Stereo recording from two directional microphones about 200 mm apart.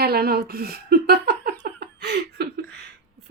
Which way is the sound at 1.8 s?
55° right (ahead or behind).